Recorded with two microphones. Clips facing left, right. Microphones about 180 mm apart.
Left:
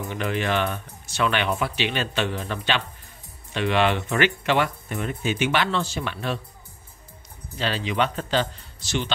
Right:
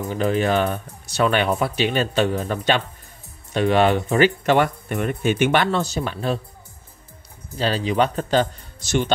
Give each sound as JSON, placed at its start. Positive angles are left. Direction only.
{"t": 0.1, "sound": "speech", "side_deg": -40}
{"t": 7.5, "sound": "speech", "side_deg": -40}